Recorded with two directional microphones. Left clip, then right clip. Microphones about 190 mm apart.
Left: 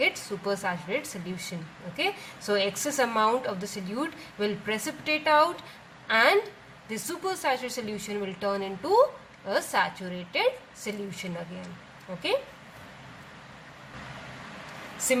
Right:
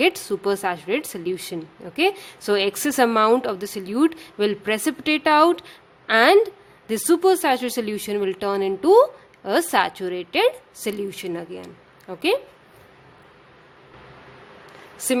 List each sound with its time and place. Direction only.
0.0 s a woman's voice: 55° right (ahead or behind)